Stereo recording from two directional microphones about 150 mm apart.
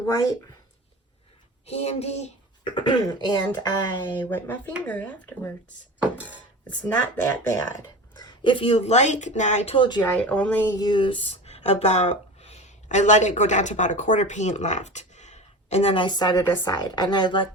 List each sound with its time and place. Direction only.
1.6 s speech: 45° left (ahead or behind)
2.7 s speech: 30° left (ahead or behind)
4.3 s speech: 15° left (ahead or behind)
8.1 s speech: 30° left (ahead or behind); by 9.7 s 50° left (ahead or behind)
9.7 s speech: 30° left (ahead or behind)
10.1 s speech: 10° left (ahead or behind)
10.8 s speech: 30° left (ahead or behind)